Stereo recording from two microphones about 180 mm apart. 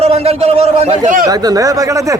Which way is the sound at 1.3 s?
20° right (ahead or behind).